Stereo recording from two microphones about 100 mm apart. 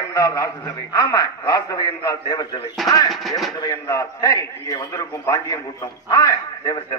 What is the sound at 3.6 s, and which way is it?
A man's voice, 35° left (ahead or behind).